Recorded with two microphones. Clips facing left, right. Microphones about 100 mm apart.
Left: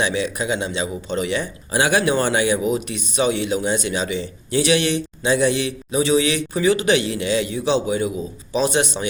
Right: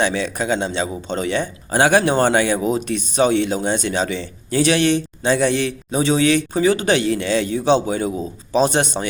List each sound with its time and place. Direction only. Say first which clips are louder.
0.1 s a man's voice: right 1 dB; 40° right (ahead or behind)